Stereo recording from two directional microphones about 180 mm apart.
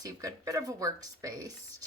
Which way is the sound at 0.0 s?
20° right (ahead or behind).